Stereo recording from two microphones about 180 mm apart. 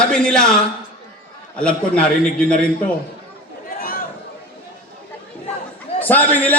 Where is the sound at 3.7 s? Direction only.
55° left (ahead or behind).